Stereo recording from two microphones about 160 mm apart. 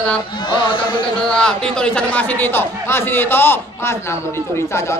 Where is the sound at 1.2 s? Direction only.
5° left (ahead or behind).